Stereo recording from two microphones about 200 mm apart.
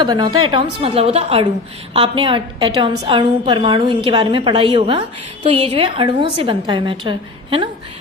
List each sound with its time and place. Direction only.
0.0 s a woman's voice: 20° right (ahead or behind)